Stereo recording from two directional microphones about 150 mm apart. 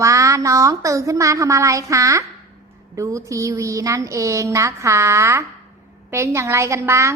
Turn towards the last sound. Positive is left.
turn(degrees=-20)  # may be behind; listen again after turning